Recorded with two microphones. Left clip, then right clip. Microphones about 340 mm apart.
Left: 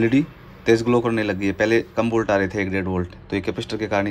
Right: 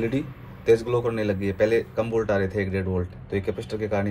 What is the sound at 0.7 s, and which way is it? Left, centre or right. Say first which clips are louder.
Speech: left 3 dB; left.